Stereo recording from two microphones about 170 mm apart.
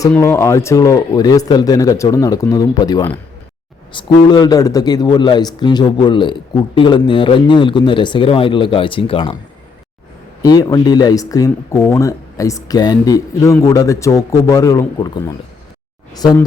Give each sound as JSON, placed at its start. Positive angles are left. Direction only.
{"t": 0.2, "sound": "a man's voice", "side_deg": 15}
{"t": 10.4, "sound": "a man's voice", "side_deg": 20}